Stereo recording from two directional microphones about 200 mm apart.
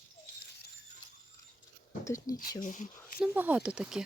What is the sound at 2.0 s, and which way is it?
Speech, 15° left (ahead or behind).